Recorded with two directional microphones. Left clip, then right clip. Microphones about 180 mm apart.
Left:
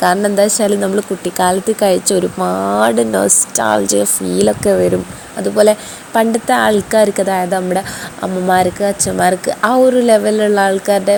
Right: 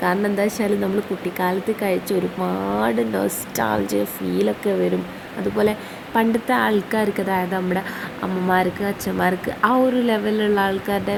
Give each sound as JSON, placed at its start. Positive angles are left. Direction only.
{"t": 0.0, "sound": "speech", "side_deg": 35}
{"t": 6.1, "sound": "a woman's voice", "side_deg": 30}